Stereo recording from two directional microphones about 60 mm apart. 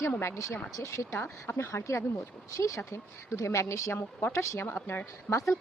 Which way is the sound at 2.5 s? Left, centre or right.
Left.